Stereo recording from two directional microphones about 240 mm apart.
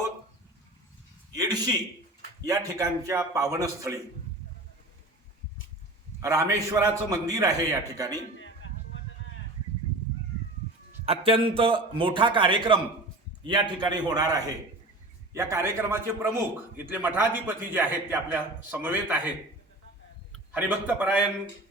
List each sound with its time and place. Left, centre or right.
1.3 s a man's voice: centre
6.1 s a man's voice: centre
11.0 s a man's voice: right; by 19.3 s centre
20.3 s a man's voice: centre